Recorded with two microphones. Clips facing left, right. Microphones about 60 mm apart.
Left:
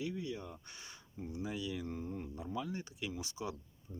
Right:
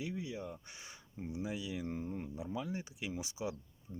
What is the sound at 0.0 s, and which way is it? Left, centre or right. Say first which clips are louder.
Speech: left 1 dB; centre.